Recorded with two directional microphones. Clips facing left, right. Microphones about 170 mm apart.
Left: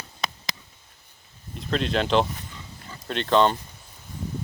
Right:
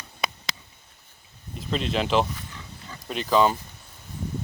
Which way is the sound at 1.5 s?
Centre (ahead or behind).